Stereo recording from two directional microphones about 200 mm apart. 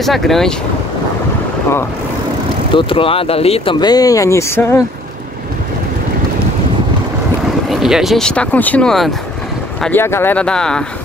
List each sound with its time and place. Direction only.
0.0 s speech: centre (ahead or behind)
2.7 s speech: 25° left (ahead or behind)
7.7 s speech: centre (ahead or behind)